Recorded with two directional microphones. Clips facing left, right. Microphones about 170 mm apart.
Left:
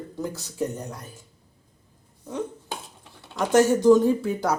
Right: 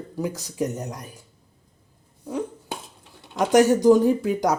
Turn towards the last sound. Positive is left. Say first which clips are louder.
# right 2 dB
turn(degrees=-15)  # may be behind; listen again after turning